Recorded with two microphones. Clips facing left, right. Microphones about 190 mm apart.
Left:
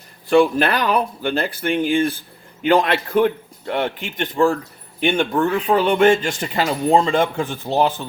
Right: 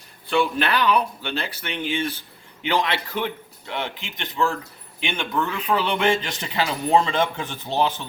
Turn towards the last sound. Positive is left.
turn(degrees=45)  # may be behind; listen again after turning